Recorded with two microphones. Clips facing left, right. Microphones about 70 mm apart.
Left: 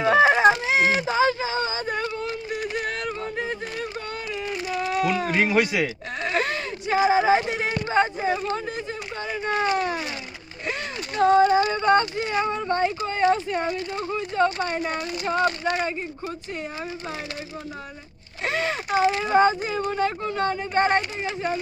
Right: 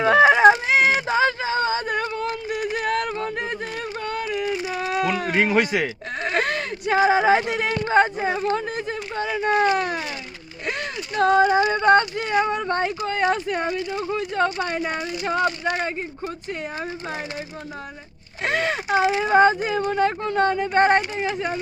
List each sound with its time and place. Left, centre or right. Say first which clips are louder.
0.0 s a sound: right 3 dB; right
7.9 s speech: right 3 dB; right
9.7 s a sound: right 1 dB; right
11.5 s speech: right 2 dB; right
15.4 s speech: even; right
15.8 s speech: right 1 dB; right
18.4 s speech: right 3 dB; right